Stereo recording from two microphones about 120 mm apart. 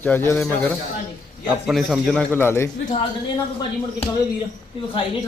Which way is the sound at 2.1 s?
15° left (ahead or behind).